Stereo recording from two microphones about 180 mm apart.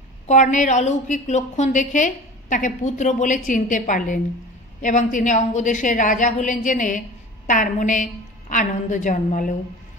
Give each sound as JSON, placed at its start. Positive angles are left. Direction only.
{"t": 0.3, "sound": "a woman's voice", "side_deg": 45}